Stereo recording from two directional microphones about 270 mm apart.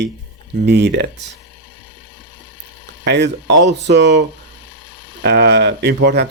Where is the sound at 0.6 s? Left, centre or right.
Right.